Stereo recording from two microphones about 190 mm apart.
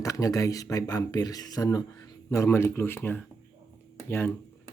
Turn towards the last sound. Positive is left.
turn(degrees=10)  # may be behind; listen again after turning